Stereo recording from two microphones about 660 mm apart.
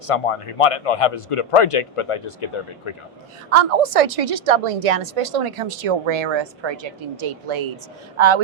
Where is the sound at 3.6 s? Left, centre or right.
Right.